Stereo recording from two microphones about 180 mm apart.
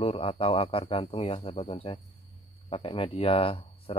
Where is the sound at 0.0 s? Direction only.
30° left (ahead or behind).